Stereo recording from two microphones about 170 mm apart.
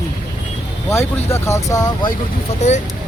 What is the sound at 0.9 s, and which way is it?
Speech, 15° left (ahead or behind).